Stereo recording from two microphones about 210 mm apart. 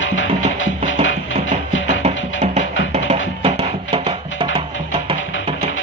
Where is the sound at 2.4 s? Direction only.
35° right (ahead or behind).